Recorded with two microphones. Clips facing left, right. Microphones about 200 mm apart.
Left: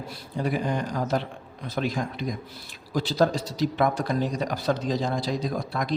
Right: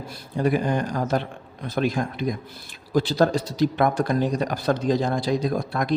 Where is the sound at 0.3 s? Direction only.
50° right (ahead or behind).